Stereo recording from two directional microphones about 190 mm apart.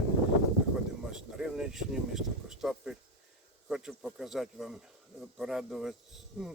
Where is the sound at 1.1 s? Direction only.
5° right (ahead or behind).